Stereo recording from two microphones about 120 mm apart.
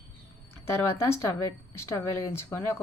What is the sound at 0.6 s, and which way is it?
A woman's voice, 20° left (ahead or behind).